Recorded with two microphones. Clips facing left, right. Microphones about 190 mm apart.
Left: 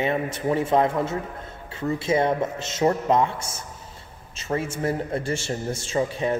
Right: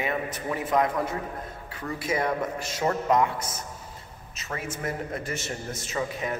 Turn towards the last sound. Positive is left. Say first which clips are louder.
# left 6 dB
turn(degrees=30)  # may be behind; listen again after turning